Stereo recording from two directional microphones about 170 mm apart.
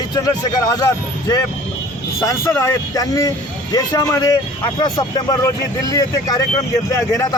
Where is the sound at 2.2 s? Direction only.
20° left (ahead or behind).